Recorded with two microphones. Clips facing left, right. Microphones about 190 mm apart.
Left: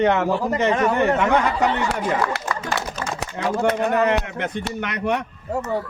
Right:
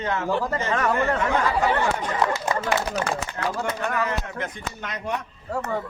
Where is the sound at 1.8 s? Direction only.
70° left (ahead or behind).